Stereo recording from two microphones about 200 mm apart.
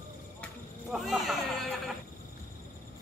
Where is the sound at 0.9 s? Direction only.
Centre (ahead or behind).